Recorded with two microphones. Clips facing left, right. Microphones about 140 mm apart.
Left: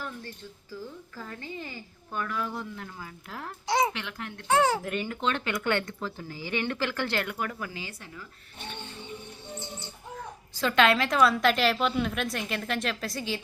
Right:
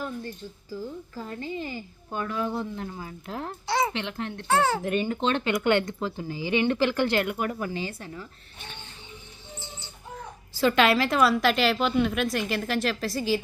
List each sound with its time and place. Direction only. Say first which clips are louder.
0.7 s speech: right 5 dB; 20° right (ahead or behind)
3.7 s speech: even; 15° left (ahead or behind)
3.9 s speech: right 6 dB; 25° right (ahead or behind)
4.4 s a child's voice: even; 15° left (ahead or behind)
4.8 s speech: right 5 dB; 25° right (ahead or behind)
9.5 s music: left 3 dB; 60° left (ahead or behind)
10.5 s a woman's voice: right 2 dB; 5° right (ahead or behind)